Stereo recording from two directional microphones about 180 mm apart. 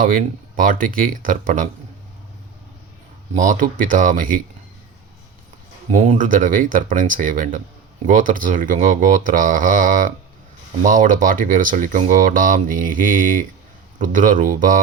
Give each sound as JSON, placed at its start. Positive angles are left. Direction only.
{"t": 0.0, "sound": "speech", "side_deg": -50}
{"t": 3.3, "sound": "speech", "side_deg": -45}
{"t": 5.9, "sound": "speech", "side_deg": -45}